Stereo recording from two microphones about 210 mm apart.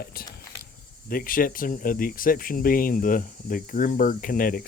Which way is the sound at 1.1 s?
40° left (ahead or behind).